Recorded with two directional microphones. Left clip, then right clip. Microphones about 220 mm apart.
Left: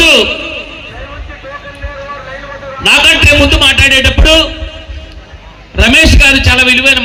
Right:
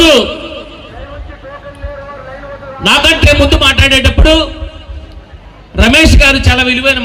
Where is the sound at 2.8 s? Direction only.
55° right (ahead or behind).